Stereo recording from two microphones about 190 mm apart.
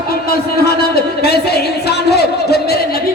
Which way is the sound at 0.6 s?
55° left (ahead or behind).